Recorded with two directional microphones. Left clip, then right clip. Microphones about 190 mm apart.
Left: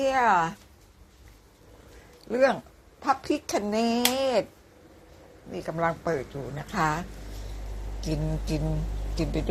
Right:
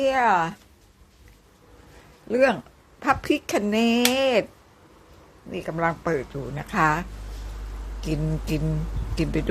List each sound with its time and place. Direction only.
0.0 s speech: 30° right (ahead or behind)
2.3 s speech: 30° right (ahead or behind)
5.5 s speech: 25° right (ahead or behind)
8.0 s speech: 25° right (ahead or behind)